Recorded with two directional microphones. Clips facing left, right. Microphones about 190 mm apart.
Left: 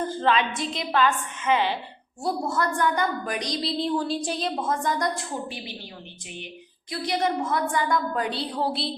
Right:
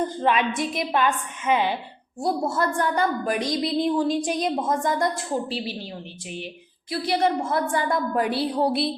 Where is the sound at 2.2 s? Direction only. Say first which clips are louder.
Right 2 dB; 25° right (ahead or behind).